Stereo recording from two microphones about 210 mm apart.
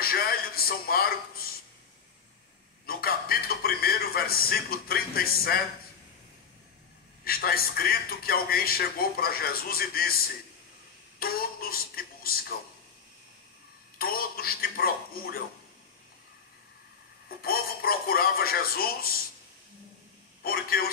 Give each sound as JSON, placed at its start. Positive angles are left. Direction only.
{"t": 0.0, "sound": "a sound", "side_deg": 45}
{"t": 2.9, "sound": "a sound", "side_deg": 45}
{"t": 7.2, "sound": "a man's voice", "side_deg": 45}
{"t": 11.1, "sound": "a woman's voice", "side_deg": 45}
{"t": 13.9, "sound": "a man's voice", "side_deg": 45}
{"t": 17.4, "sound": "a man's voice", "side_deg": 45}
{"t": 20.4, "sound": "a man's voice", "side_deg": 45}